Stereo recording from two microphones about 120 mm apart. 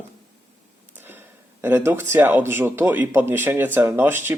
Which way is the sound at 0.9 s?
15° right (ahead or behind).